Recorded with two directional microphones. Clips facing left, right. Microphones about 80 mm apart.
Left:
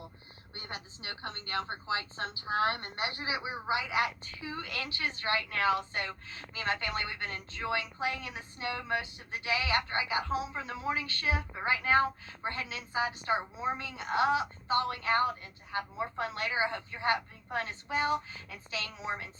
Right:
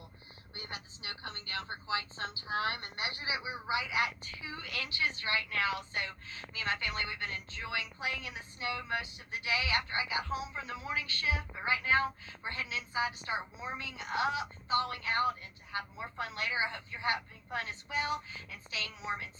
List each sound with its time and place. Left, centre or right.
0.5 s a woman's voice: left